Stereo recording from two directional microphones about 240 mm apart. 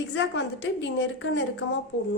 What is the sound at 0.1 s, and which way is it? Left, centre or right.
A woman's voice, left.